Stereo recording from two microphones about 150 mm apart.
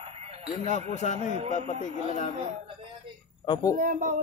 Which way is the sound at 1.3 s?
45° right (ahead or behind).